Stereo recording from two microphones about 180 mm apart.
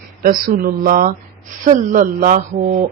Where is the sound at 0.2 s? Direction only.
50° right (ahead or behind).